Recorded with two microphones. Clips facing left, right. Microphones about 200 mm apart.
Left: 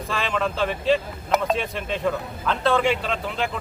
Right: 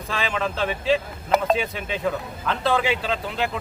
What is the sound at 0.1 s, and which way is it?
A man's voice, centre (ahead or behind).